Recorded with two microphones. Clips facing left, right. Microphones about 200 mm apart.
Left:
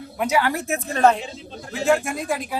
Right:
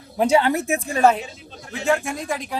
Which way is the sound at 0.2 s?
30° right (ahead or behind).